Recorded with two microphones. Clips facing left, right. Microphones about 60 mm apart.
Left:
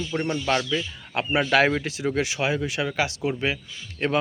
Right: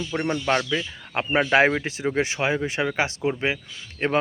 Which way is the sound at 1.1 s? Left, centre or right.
Right.